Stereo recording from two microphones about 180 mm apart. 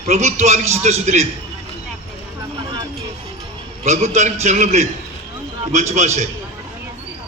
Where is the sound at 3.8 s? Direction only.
40° right (ahead or behind).